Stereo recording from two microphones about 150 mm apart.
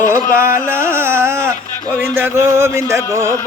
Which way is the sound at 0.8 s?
15° right (ahead or behind).